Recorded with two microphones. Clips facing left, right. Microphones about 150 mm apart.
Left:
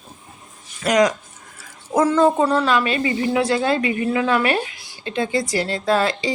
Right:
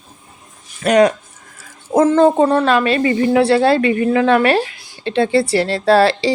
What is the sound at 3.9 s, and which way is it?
Speech, 50° right (ahead or behind).